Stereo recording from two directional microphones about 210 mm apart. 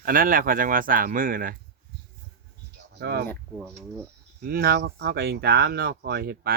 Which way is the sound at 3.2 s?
5° left (ahead or behind).